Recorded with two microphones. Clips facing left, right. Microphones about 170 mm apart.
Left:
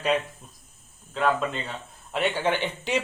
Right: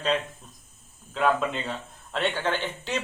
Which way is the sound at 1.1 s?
Centre (ahead or behind).